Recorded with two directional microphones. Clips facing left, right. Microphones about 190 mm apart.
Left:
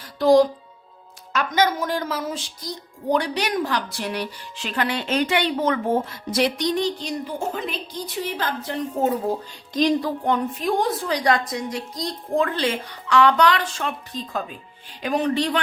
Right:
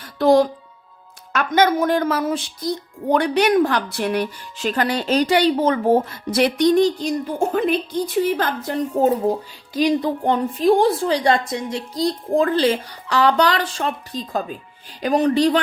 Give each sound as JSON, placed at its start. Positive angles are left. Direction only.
{"t": 0.0, "sound": "music", "side_deg": -60}
{"t": 1.3, "sound": "speech", "side_deg": -55}
{"t": 6.3, "sound": "a woman's voice", "side_deg": -55}
{"t": 9.0, "sound": "a woman's voice", "side_deg": -35}
{"t": 9.3, "sound": "speech", "side_deg": -10}
{"t": 10.0, "sound": "a woman's voice", "side_deg": -30}